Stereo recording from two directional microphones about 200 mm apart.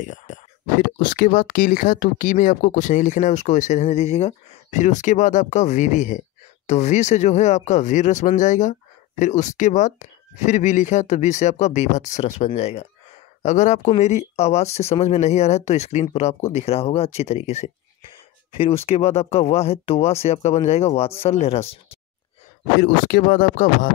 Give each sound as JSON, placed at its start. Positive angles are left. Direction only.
{"t": 0.0, "sound": "a sound", "side_deg": 40}
{"t": 0.8, "sound": "speech", "side_deg": 45}
{"t": 18.9, "sound": "speech", "side_deg": 30}
{"t": 22.8, "sound": "speech", "side_deg": 45}